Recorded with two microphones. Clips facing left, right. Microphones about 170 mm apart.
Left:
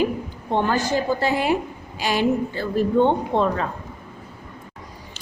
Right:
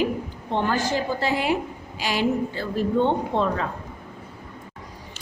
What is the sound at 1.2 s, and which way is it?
A woman's voice, 45° left (ahead or behind).